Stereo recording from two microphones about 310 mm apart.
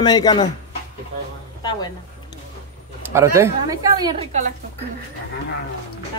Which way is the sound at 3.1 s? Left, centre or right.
Centre.